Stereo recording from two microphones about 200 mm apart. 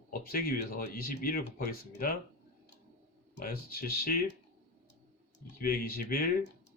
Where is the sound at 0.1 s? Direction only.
45° left (ahead or behind).